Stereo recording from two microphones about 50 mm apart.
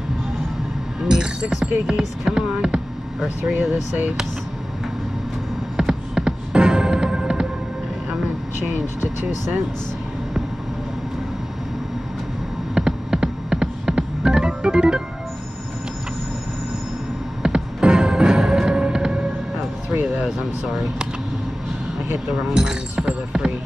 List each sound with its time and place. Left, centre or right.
1.0 s music: centre
1.9 s speech: centre
5.8 s music: centre
12.7 s music: centre
17.4 s music: centre
19.9 s music: right
20.6 s speech: centre
22.5 s a sound: centre